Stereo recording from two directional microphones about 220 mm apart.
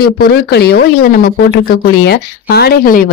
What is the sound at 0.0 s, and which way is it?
Speech, 45° left (ahead or behind).